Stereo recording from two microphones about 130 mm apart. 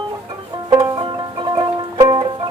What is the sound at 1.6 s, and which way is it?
Music, 35° right (ahead or behind).